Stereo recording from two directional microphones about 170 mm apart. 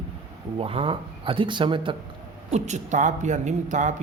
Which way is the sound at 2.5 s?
45° right (ahead or behind).